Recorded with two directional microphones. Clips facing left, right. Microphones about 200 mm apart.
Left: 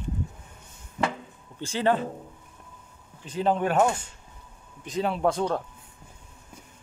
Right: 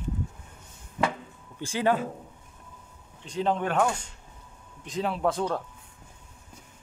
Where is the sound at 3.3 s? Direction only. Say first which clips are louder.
Left 2 dB; 5° left (ahead or behind).